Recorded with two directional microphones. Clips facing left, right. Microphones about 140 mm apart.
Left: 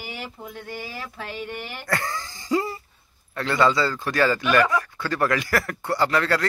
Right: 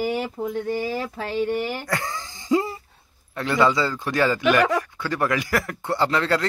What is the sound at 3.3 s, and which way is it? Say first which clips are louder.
A man's voice: right 1 dB; 15° right (ahead or behind).